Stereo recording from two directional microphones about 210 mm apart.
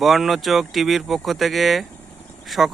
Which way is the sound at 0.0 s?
Centre (ahead or behind).